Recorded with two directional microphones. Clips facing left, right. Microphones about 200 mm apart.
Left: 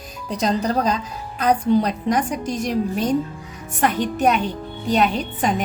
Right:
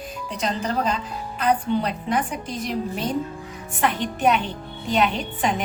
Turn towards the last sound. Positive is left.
turn(degrees=40)  # may be behind; listen again after turning